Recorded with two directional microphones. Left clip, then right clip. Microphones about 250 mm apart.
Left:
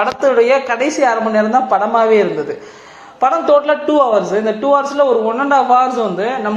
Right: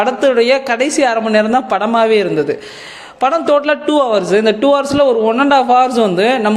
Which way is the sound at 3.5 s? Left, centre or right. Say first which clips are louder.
Left 1 dB; right.